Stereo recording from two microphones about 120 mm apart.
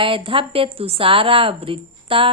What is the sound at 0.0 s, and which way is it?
Speech, 45° right (ahead or behind).